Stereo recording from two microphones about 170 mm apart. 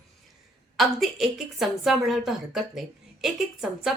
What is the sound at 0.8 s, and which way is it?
Speech, centre (ahead or behind).